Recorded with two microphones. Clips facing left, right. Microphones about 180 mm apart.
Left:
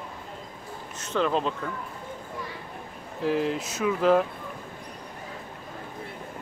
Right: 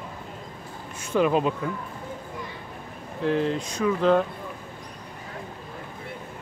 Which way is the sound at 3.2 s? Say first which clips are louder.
Right 1 dB; 5° left (ahead or behind).